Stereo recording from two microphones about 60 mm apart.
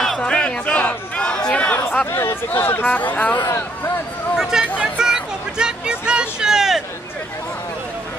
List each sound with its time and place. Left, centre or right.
0.2 s a sound: centre
1.5 s chatter: left
2.0 s speech: left
3.4 s speech: left
4.4 s speech: centre